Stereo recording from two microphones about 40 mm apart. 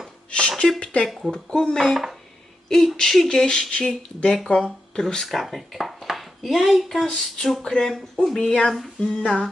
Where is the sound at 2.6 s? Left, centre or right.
Centre.